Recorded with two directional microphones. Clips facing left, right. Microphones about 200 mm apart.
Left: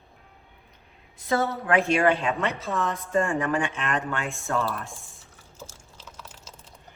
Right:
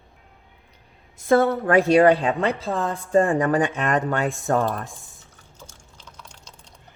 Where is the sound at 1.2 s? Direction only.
55° right (ahead or behind).